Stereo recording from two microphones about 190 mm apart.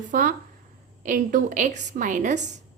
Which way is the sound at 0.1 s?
45° right (ahead or behind).